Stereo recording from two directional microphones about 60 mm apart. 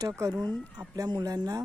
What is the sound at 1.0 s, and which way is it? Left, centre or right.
Speech, right.